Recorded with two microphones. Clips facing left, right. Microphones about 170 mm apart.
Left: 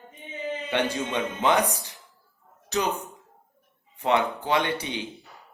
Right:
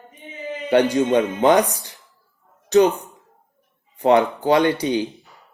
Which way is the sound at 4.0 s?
35° right (ahead or behind).